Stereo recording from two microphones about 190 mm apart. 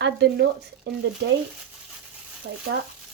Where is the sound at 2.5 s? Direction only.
65° right (ahead or behind).